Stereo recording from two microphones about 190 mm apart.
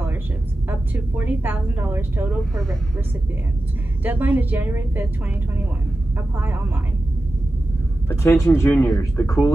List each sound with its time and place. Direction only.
0.7 s a woman's voice: 10° right (ahead or behind)
4.0 s a woman's voice: 10° right (ahead or behind)
6.3 s a woman's voice: 10° right (ahead or behind)
8.1 s speech: 15° left (ahead or behind)